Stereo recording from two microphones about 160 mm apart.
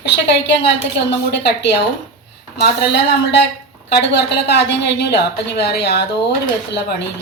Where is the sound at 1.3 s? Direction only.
90° left.